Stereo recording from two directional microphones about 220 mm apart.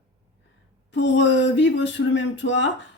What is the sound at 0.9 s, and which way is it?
Female singing, 55° left (ahead or behind).